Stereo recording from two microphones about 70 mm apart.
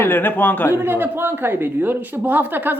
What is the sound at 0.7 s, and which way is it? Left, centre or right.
A woman's voice, right.